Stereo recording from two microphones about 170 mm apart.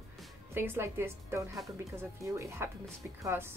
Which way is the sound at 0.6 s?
15° right (ahead or behind).